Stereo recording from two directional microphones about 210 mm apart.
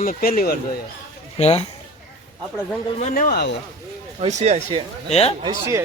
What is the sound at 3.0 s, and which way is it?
Speech, 35° left (ahead or behind).